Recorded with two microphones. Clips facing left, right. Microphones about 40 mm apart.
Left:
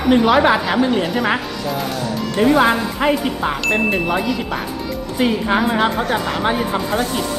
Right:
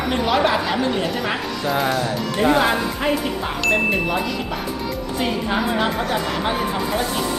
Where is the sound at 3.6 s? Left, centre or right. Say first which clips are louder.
Even; centre.